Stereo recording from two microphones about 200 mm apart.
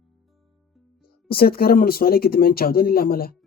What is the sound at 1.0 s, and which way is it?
Speech, 50° left (ahead or behind).